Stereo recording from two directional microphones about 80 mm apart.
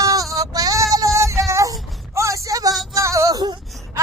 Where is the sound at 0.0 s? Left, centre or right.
Right.